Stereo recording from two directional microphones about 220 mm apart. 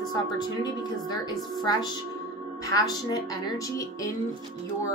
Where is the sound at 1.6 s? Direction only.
20° left (ahead or behind).